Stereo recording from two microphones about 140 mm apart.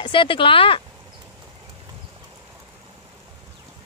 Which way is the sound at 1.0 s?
30° right (ahead or behind).